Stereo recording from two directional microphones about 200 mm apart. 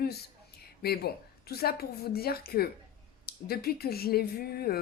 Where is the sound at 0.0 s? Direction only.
50° left (ahead or behind).